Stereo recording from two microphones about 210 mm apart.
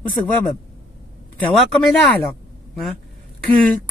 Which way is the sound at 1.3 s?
5° left (ahead or behind).